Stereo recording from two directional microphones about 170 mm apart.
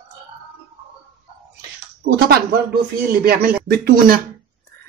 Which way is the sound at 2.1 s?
65° right (ahead or behind).